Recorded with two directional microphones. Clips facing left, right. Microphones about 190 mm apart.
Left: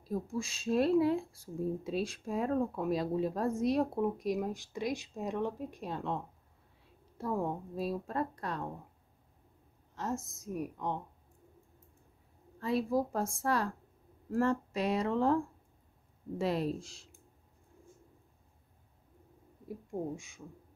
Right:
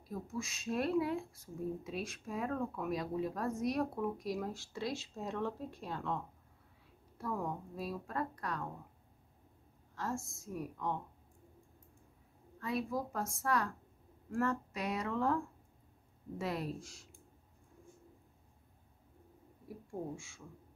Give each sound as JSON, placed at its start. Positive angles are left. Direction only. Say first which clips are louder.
{"t": 0.1, "sound": "speech", "louder": "left 6 dB", "side_deg": 30}
{"t": 9.9, "sound": "speech", "louder": "left 3 dB", "side_deg": 20}
{"t": 12.5, "sound": "speech", "louder": "left 6 dB", "side_deg": 30}
{"t": 19.7, "sound": "speech", "louder": "left 5 dB", "side_deg": 20}